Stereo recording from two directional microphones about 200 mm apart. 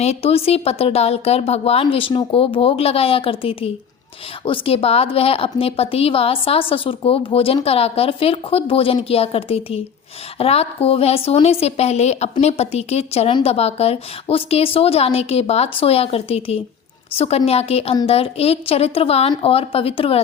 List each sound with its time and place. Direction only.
0.0 s a woman's voice: 30° left (ahead or behind)